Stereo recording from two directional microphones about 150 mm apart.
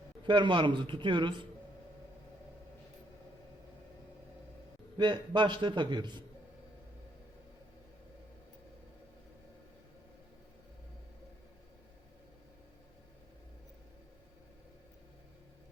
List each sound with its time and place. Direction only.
0.3 s a man's voice: 30° right (ahead or behind)
4.9 s a man's voice: 30° right (ahead or behind)